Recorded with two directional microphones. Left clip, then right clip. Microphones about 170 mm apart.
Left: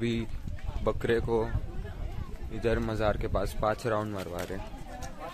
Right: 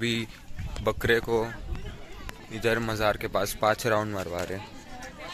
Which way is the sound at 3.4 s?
10° right (ahead or behind).